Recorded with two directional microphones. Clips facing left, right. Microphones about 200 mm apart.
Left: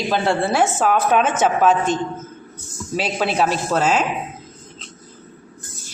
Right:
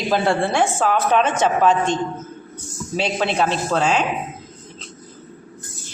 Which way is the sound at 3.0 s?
5° left (ahead or behind).